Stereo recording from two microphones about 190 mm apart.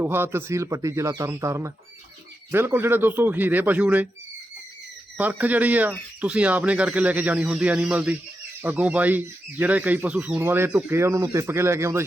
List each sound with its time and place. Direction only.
0.0 s speech: 10° right (ahead or behind)
5.1 s speech: 10° right (ahead or behind)